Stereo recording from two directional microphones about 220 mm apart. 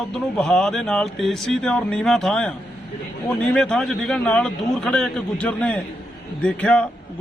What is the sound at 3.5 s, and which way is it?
Speech, centre (ahead or behind).